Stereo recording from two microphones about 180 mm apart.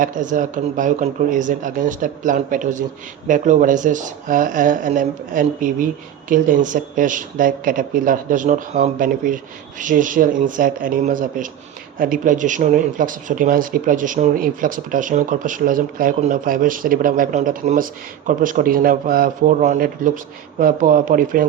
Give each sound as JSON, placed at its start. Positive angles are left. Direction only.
{"t": 0.0, "sound": "speech", "side_deg": -45}